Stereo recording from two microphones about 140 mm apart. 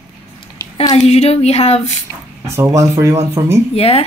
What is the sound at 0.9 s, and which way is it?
Speech, 50° left (ahead or behind).